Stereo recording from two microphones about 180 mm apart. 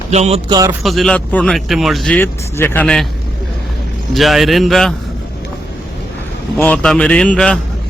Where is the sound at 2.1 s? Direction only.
10° left (ahead or behind).